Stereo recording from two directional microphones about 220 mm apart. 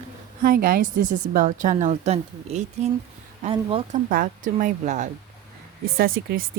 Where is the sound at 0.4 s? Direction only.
40° right (ahead or behind); by 4.0 s 25° right (ahead or behind).